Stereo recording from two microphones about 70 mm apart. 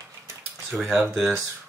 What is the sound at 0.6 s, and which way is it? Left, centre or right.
Speech, centre.